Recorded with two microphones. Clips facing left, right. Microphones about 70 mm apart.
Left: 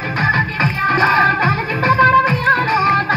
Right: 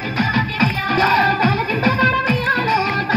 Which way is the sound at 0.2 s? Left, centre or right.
Left.